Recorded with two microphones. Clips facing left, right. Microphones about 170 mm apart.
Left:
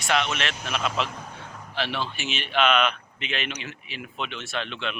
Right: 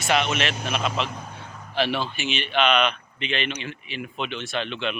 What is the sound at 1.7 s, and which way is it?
Speech, 10° right (ahead or behind).